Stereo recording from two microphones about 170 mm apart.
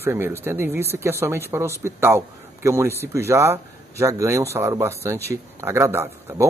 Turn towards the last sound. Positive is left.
turn(degrees=-15)  # may be behind; listen again after turning